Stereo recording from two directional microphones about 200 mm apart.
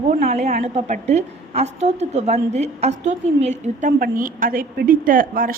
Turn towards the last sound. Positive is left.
turn(degrees=-45)  # may be behind; listen again after turning